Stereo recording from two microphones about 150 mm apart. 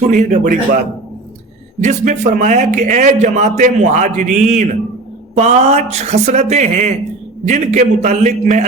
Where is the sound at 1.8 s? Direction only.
55° right (ahead or behind).